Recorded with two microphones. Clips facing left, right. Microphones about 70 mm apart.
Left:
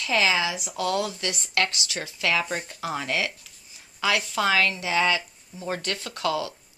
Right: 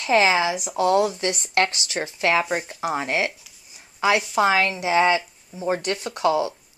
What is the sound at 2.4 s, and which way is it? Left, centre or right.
Speech, centre.